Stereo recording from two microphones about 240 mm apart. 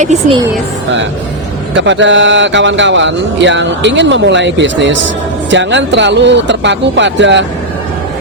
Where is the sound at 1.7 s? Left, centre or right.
Right.